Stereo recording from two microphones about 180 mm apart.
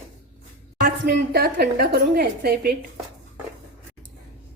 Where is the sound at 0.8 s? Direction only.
60° right (ahead or behind).